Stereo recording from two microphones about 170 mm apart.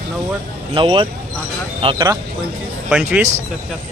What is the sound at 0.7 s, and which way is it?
Speech, 30° right (ahead or behind).